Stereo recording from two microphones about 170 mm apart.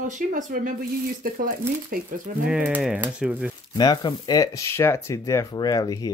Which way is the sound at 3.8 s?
25° left (ahead or behind).